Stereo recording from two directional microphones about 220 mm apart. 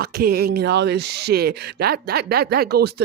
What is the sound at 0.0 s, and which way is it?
Speech, 45° right (ahead or behind).